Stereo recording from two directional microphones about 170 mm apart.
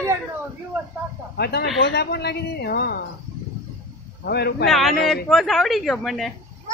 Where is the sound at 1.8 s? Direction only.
80° left.